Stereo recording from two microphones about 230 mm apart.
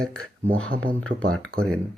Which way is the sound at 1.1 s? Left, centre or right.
Right.